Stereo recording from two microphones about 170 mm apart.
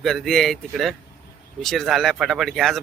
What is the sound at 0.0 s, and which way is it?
Speech, centre (ahead or behind).